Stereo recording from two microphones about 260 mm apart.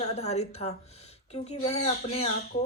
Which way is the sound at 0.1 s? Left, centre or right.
Left.